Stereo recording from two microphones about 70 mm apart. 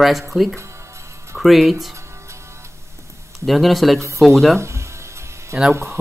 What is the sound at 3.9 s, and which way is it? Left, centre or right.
Speech, right.